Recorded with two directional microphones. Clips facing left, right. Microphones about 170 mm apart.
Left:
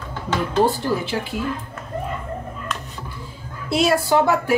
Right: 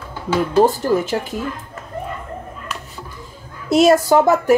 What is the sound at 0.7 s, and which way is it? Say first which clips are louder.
Speech: right 4 dB; 45° right (ahead or behind).